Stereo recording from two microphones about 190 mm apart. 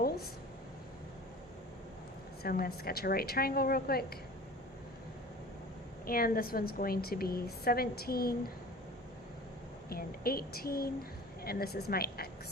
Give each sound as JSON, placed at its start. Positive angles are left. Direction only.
{"t": 2.4, "sound": "a woman's voice", "side_deg": 50}
{"t": 6.1, "sound": "a woman's voice", "side_deg": 50}
{"t": 9.9, "sound": "a woman's voice", "side_deg": 50}